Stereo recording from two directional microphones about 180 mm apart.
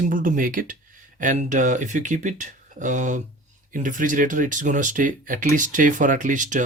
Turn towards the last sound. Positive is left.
turn(degrees=-45)  # may be behind; listen again after turning